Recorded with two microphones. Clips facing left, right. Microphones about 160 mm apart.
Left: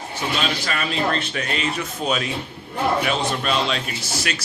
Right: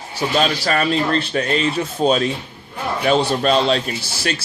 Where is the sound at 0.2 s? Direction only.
40° right (ahead or behind).